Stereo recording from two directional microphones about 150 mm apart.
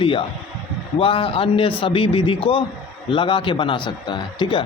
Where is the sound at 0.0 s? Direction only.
35° left (ahead or behind).